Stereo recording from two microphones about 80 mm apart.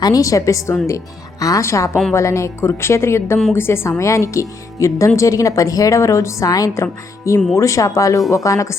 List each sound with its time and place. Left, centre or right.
0.0 s a woman's voice: left